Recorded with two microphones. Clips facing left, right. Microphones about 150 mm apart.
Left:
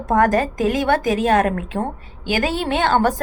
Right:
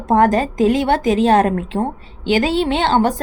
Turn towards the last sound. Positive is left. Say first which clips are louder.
# right 2 dB
turn(degrees=-25)  # may be behind; listen again after turning